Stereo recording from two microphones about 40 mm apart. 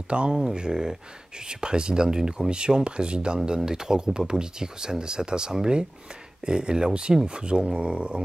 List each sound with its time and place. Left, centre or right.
0.1 s speech: right
0.6 s speech: centre